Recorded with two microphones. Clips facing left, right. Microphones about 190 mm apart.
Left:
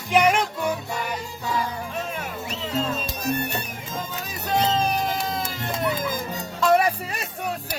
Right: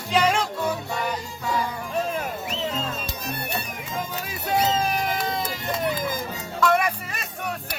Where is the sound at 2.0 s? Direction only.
35° right (ahead or behind).